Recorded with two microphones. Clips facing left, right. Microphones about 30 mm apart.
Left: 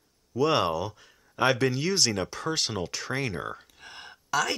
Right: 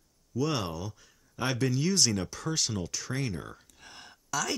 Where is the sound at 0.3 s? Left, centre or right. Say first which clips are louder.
Left 7 dB; left.